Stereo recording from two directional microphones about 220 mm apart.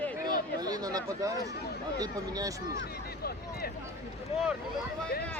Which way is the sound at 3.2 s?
45° left (ahead or behind).